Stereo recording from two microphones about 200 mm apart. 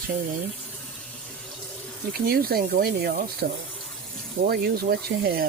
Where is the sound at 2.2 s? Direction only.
50° right (ahead or behind).